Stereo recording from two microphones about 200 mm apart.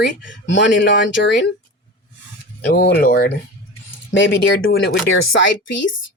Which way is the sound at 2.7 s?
55° left (ahead or behind).